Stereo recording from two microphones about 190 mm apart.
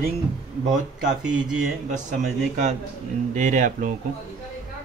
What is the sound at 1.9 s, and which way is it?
Speech, 40° right (ahead or behind).